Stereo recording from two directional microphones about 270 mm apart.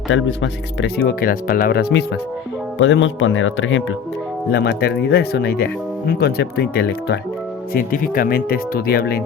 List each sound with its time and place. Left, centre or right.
0.1 s speech: left